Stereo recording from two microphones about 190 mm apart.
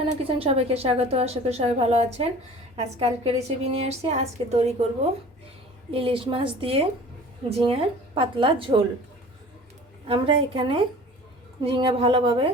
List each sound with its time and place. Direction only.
0.0 s a woman's voice: 30° right (ahead or behind)
5.9 s a woman's voice: 30° right (ahead or behind)
10.1 s a woman's voice: 30° right (ahead or behind)